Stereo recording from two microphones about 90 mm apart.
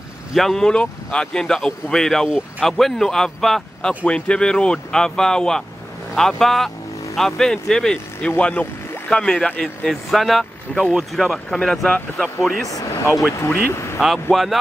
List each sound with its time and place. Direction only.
0.3 s speech: 5° left (ahead or behind)
10.8 s speech: 10° right (ahead or behind)
11.1 s speech: 5° left (ahead or behind)
13.5 s speech: 25° left (ahead or behind)
13.9 s speech: centre (ahead or behind)